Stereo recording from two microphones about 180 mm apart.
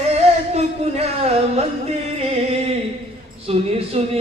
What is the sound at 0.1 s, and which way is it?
Music, 35° right (ahead or behind).